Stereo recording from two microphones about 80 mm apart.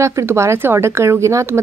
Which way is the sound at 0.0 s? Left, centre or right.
Right.